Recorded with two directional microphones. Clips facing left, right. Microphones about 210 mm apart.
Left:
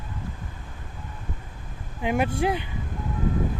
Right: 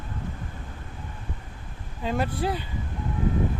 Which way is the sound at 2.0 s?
15° left (ahead or behind).